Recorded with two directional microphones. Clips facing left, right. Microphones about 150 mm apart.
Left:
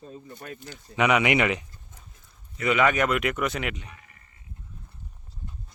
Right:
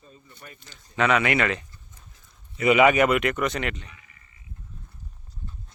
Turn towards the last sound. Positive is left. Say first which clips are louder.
# left 3 dB
turn(degrees=50)  # may be behind; listen again after turning